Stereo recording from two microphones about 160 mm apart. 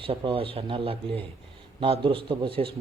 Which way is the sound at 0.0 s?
35° right (ahead or behind).